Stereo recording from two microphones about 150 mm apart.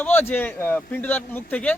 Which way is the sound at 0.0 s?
10° left (ahead or behind).